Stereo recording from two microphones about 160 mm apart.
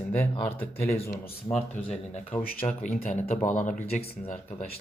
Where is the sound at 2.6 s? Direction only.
35° left (ahead or behind); by 3.8 s 55° left (ahead or behind).